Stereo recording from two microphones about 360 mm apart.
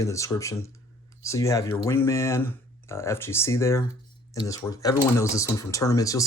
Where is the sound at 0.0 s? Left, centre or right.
Centre.